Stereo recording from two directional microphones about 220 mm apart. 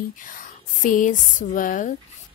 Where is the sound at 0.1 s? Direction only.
35° left (ahead or behind).